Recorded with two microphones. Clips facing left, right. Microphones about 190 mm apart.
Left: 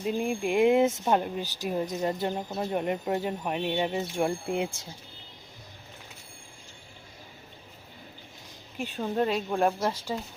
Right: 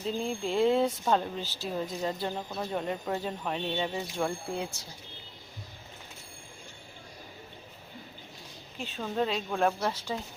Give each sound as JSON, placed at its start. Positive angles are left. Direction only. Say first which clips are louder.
{"t": 0.0, "sound": "speech", "louder": "left 3 dB", "side_deg": 10}
{"t": 8.8, "sound": "speech", "louder": "left 3 dB", "side_deg": 15}